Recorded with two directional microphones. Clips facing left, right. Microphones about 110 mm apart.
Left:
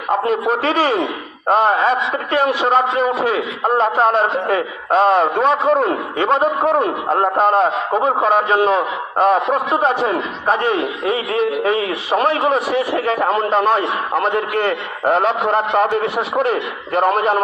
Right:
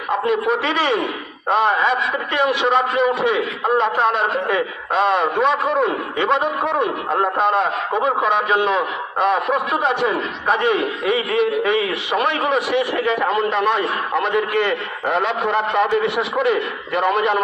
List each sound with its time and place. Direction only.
0.1 s a man's voice: 40° left (ahead or behind)